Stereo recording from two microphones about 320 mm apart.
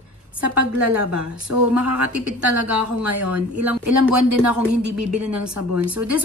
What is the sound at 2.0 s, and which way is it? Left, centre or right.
A woman's voice, right.